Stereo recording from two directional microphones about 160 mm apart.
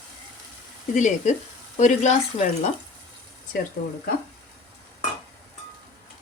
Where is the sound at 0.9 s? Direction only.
50° left (ahead or behind).